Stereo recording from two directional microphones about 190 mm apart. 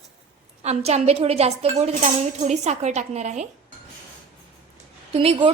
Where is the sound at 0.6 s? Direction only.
35° right (ahead or behind).